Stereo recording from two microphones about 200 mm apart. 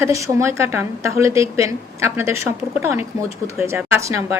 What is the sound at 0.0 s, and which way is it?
A woman's voice, 15° right (ahead or behind).